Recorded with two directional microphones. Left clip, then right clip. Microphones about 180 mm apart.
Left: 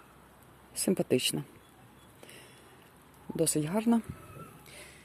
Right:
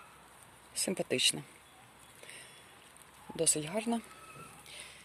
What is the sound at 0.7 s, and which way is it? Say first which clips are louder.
Speech: left 5 dB; 10° left (ahead or behind).